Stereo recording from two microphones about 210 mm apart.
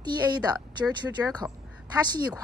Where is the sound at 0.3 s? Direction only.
20° right (ahead or behind).